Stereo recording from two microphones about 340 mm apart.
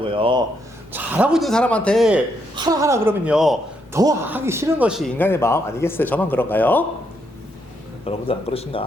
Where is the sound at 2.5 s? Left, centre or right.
Centre.